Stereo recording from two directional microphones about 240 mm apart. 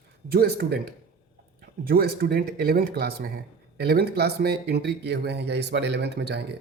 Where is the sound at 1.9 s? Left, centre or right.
Right.